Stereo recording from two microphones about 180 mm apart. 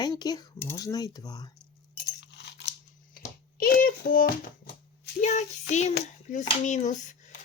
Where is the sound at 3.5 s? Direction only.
55° left (ahead or behind).